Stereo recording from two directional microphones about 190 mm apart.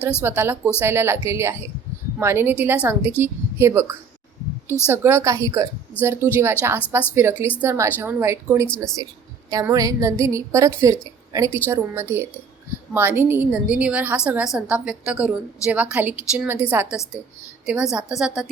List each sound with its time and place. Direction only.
0.2 s a woman's voice: 10° right (ahead or behind)